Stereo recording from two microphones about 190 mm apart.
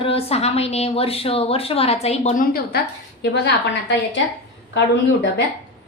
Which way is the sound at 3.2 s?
60° left (ahead or behind).